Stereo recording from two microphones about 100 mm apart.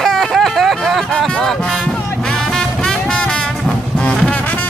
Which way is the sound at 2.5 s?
10° left (ahead or behind).